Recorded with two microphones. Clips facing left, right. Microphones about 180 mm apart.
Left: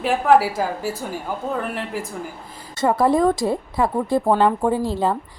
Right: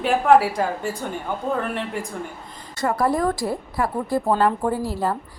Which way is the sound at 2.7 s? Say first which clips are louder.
Left 4 dB; 25° left (ahead or behind).